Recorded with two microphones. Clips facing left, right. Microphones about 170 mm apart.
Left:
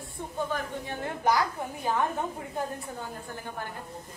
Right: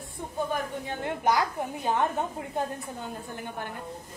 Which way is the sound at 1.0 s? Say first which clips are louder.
Right 1 dB; 20° right (ahead or behind).